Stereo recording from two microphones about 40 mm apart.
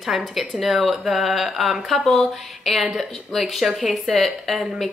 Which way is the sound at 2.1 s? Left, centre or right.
Centre.